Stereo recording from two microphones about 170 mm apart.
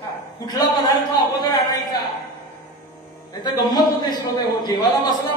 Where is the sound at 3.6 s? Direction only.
25° left (ahead or behind).